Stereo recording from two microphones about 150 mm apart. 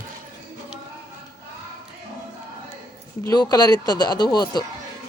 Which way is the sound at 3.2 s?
25° left (ahead or behind).